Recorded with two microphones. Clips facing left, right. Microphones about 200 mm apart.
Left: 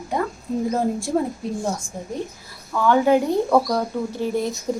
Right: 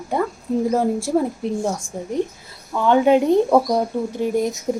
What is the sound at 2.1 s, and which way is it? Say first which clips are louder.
Speech: right 8 dB; 20° right (ahead or behind).